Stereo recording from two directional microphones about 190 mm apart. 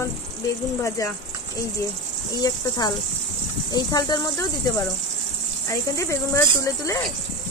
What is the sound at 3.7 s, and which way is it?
Speech, 20° left (ahead or behind).